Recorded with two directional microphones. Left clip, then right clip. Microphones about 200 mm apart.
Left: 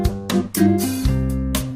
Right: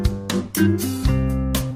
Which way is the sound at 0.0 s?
Centre (ahead or behind).